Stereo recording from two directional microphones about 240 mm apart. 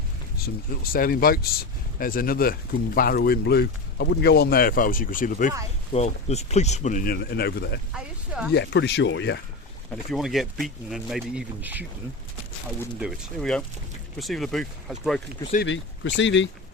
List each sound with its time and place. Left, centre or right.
0.3 s speech: left
7.9 s speech: centre
8.5 s speech: left
10.1 s speech: centre
13.0 s speech: centre
15.6 s speech: left